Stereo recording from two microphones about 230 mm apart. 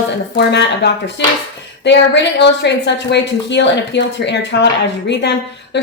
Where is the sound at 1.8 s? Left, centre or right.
Left.